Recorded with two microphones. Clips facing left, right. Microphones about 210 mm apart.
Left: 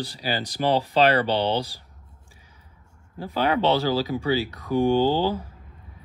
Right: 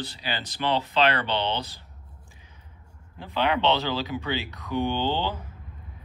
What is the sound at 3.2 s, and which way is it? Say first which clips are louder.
Speech: left 2 dB; 40° left (ahead or behind).